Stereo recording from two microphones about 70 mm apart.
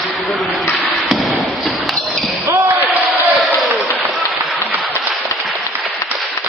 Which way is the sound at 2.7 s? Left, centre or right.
Right.